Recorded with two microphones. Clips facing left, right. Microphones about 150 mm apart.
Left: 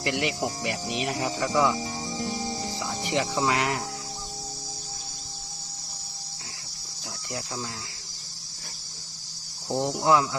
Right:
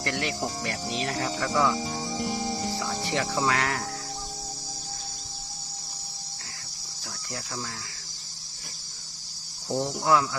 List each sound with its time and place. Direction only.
0.0 s cricket: 15° left (ahead or behind)
2.7 s speech: 20° left (ahead or behind)
7.3 s cricket: 25° left (ahead or behind)
9.7 s cricket: 20° left (ahead or behind)